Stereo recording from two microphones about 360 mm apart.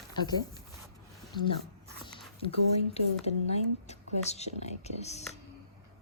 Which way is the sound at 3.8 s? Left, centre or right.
Centre.